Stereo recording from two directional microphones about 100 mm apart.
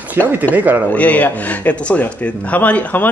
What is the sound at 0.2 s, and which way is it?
Speech, 20° right (ahead or behind).